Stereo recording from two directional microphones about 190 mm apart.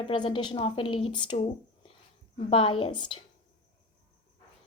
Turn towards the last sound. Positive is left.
turn(degrees=25)  # may be behind; listen again after turning